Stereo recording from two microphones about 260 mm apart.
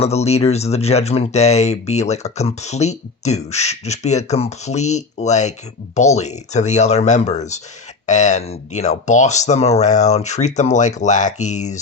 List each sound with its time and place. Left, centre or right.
0.0 s speech: left